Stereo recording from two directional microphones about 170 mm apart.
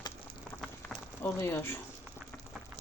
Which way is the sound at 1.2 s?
15° left (ahead or behind).